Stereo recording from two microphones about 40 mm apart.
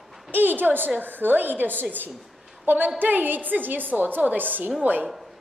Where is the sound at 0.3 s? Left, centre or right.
Right.